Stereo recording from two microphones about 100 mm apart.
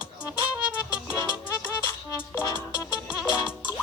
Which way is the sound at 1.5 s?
30° left (ahead or behind).